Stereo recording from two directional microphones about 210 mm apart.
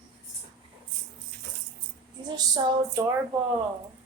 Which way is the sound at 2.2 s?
20° right (ahead or behind).